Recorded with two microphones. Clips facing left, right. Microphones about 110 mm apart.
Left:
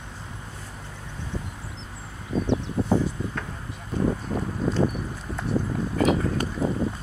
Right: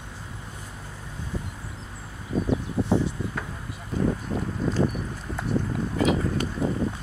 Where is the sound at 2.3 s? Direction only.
25° left (ahead or behind).